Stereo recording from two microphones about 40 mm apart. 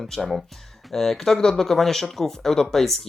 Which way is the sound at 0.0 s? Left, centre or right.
Centre.